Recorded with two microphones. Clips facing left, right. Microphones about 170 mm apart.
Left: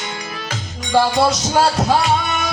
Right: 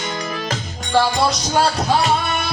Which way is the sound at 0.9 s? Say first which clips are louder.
Left 2 dB; 5° left (ahead or behind).